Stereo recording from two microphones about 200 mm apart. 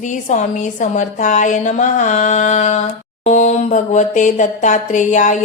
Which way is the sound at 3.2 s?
35° left (ahead or behind).